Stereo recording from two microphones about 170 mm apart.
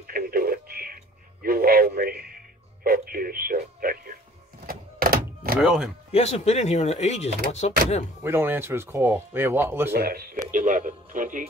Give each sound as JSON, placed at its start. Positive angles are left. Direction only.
{"t": 0.0, "sound": "radio", "side_deg": -60}
{"t": 1.4, "sound": "a man's voice", "side_deg": -60}
{"t": 4.6, "sound": "door", "side_deg": -60}
{"t": 5.6, "sound": "speech", "side_deg": 0}
{"t": 6.1, "sound": "speech", "side_deg": 40}
{"t": 8.2, "sound": "speech", "side_deg": -15}
{"t": 9.8, "sound": "speech", "side_deg": -65}
{"t": 10.5, "sound": "speech", "side_deg": -50}